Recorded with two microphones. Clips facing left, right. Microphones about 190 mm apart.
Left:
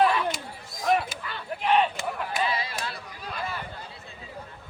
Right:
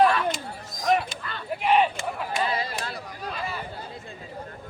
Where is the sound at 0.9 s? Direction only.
5° left (ahead or behind).